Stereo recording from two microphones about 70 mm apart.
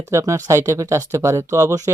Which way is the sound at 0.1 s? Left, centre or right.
Right.